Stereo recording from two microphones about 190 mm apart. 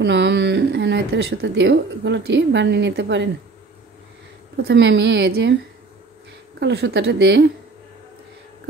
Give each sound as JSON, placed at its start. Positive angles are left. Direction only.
{"t": 0.0, "sound": "speech", "side_deg": -65}
{"t": 4.6, "sound": "speech", "side_deg": -65}
{"t": 6.6, "sound": "a woman's voice", "side_deg": -60}